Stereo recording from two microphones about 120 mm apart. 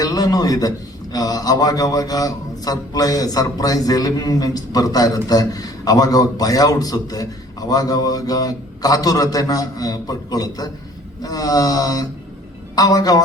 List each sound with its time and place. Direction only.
0.0 s a man's voice: 30° left (ahead or behind)